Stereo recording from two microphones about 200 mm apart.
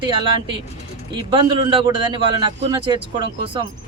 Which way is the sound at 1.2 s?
25° right (ahead or behind).